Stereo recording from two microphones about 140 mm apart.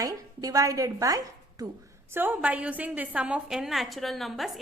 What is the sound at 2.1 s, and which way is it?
A woman's voice, 15° right (ahead or behind).